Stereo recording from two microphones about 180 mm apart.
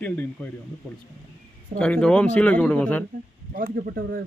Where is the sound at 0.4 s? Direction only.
5° left (ahead or behind).